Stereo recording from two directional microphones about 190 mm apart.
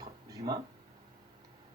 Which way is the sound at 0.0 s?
20° right (ahead or behind).